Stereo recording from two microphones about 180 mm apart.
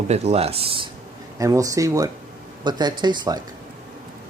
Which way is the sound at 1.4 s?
20° right (ahead or behind).